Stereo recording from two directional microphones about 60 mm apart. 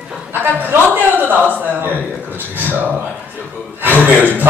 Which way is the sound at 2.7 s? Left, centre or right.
Right.